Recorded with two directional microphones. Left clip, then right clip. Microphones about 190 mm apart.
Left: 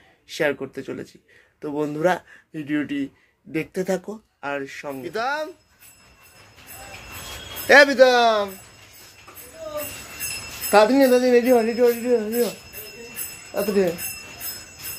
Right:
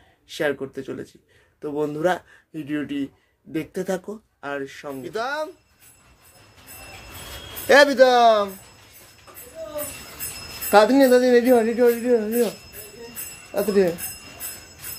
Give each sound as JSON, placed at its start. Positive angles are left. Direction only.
{"t": 0.3, "sound": "speech", "side_deg": 5}
{"t": 7.6, "sound": "jingle bell", "side_deg": -5}
{"t": 10.7, "sound": "jingle bell", "side_deg": -15}